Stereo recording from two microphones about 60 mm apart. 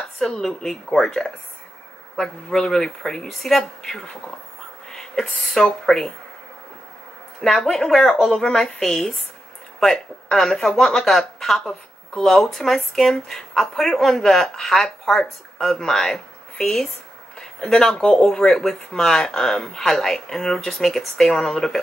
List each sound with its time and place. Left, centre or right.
0.2 s speech: centre
7.4 s speech: centre